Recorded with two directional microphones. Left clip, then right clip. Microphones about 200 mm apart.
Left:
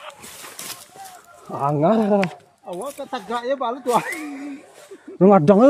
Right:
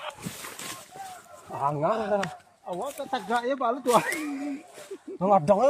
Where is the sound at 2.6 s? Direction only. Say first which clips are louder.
Left 2 dB; 55° left (ahead or behind).